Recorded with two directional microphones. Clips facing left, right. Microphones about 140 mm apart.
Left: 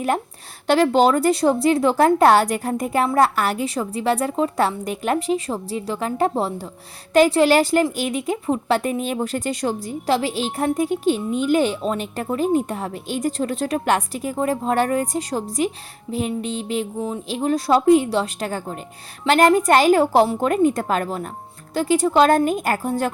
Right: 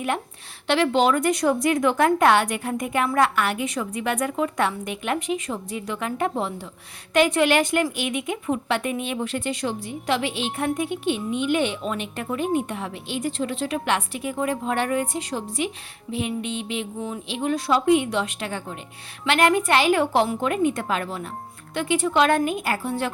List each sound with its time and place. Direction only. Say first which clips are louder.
0.7 s a woman's voice: left 4 dB; 40° left (ahead or behind)